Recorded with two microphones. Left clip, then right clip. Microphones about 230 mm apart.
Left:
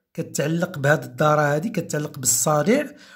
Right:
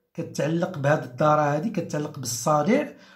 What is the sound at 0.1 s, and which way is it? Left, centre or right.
Speech, left.